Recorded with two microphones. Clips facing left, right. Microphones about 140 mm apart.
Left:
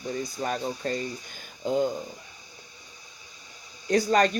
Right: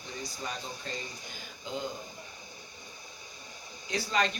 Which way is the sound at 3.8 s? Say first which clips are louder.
Left 9 dB; 45° left (ahead or behind).